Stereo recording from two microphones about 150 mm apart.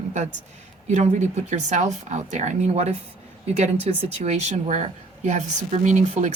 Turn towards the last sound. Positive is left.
turn(degrees=-50)  # may be behind; listen again after turning